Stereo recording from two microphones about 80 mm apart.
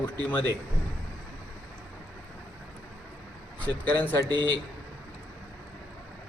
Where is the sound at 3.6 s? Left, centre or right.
Left.